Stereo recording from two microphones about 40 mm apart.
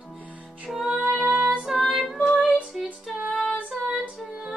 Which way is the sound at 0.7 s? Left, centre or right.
Centre.